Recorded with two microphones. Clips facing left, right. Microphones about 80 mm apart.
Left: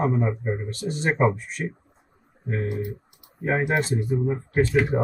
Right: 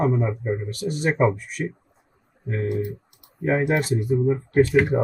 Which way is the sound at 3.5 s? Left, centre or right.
Left.